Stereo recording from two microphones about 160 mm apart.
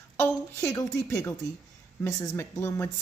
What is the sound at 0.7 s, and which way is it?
A woman's voice, 20° left (ahead or behind).